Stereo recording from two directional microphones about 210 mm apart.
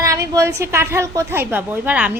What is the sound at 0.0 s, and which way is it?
A woman's voice, 15° right (ahead or behind).